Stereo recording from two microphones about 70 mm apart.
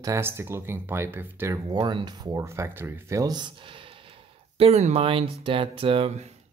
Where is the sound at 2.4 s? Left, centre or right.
Right.